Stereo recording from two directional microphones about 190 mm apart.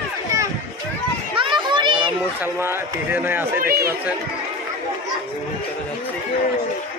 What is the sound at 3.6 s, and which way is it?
Speech, 50° right (ahead or behind).